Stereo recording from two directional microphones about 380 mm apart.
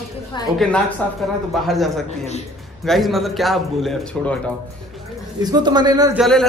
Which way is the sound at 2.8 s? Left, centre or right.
Centre.